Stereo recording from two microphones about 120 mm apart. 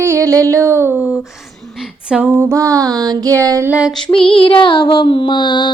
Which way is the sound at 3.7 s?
10° right (ahead or behind).